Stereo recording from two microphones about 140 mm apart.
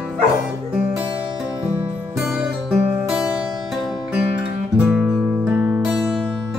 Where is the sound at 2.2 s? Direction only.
5° right (ahead or behind).